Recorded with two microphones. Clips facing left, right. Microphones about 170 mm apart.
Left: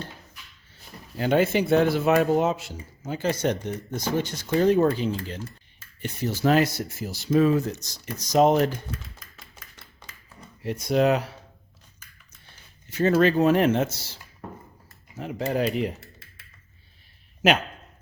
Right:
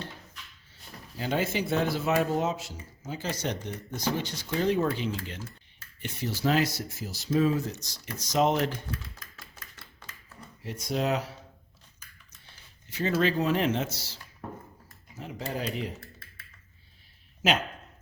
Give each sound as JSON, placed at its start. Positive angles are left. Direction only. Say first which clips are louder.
{"t": 1.1, "sound": "speech", "louder": "left 8 dB", "side_deg": 60}
{"t": 8.3, "sound": "speech", "louder": "left 6 dB", "side_deg": 40}
{"t": 10.6, "sound": "speech", "louder": "left 8 dB", "side_deg": 60}
{"t": 12.9, "sound": "speech", "louder": "left 7 dB", "side_deg": 50}
{"t": 15.2, "sound": "speech", "louder": "left 8 dB", "side_deg": 60}